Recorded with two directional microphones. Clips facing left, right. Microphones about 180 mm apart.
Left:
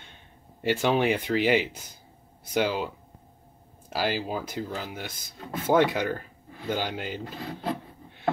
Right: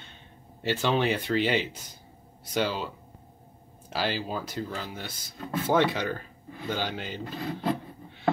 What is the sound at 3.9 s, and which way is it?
Speech, 10° left (ahead or behind).